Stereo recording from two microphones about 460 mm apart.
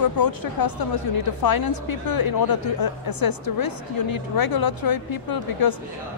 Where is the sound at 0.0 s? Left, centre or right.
Left.